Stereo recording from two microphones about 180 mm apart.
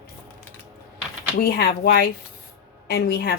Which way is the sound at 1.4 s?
55° left (ahead or behind).